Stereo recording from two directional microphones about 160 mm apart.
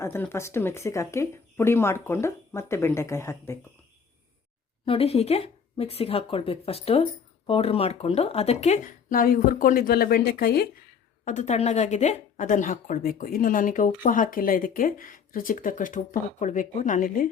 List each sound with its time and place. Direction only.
0.0 s speech: 15° left (ahead or behind)
4.9 s speech: 40° left (ahead or behind); by 10.7 s 80° left
11.3 s speech: 45° left (ahead or behind)